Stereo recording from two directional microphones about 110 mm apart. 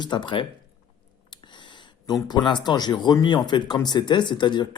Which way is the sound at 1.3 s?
45° left (ahead or behind).